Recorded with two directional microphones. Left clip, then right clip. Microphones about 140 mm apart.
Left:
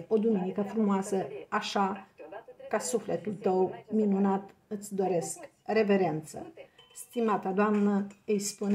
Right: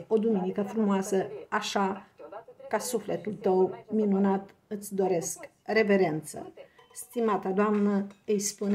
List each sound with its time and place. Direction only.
0.1 s speech: 25° right (ahead or behind)